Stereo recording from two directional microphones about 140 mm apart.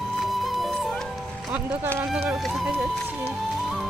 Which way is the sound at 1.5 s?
10° right (ahead or behind).